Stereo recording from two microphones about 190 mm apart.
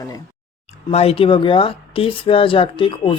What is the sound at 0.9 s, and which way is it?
Speech, 30° left (ahead or behind).